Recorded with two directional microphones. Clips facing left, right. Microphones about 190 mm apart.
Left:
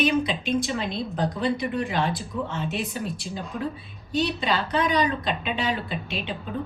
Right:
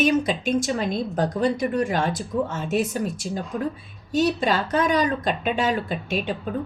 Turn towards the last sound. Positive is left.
turn(degrees=-45)  # may be behind; listen again after turning